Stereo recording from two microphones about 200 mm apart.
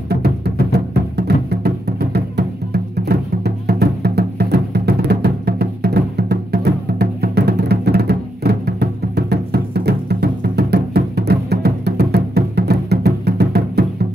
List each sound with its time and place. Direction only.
0.1 s music: 55° right (ahead or behind)